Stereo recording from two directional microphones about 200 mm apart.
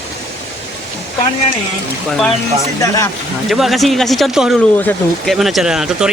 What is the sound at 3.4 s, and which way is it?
Speech, centre (ahead or behind).